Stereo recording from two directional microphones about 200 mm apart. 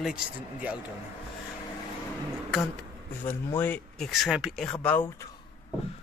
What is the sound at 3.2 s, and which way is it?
Speech, 10° left (ahead or behind).